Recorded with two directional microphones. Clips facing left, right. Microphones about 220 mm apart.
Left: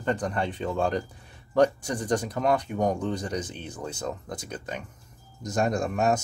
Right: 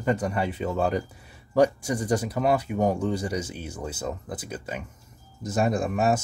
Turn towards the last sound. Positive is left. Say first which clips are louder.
# right 1 dB
turn(degrees=-5)  # may be behind; listen again after turning